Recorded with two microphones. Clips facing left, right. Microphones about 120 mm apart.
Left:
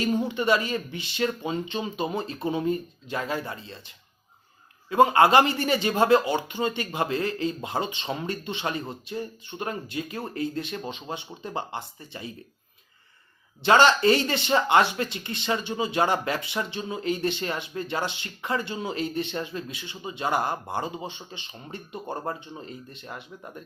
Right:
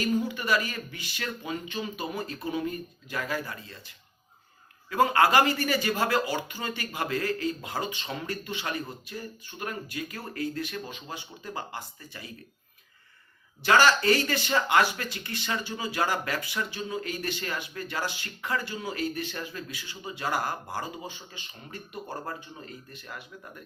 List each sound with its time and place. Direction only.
0.0 s speech: 25° left (ahead or behind)
13.6 s speech: 25° left (ahead or behind)